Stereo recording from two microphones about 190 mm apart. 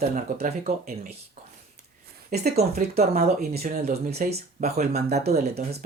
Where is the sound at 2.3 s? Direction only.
55° right (ahead or behind).